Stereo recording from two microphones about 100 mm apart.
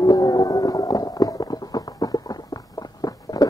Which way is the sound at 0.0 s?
40° left (ahead or behind).